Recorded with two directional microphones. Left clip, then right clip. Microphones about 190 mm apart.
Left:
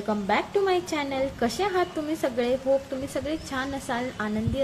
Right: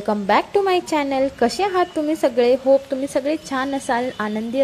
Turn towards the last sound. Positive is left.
turn(degrees=-45)  # may be behind; listen again after turning